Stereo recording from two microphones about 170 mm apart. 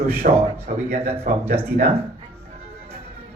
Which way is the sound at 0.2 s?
50° right (ahead or behind).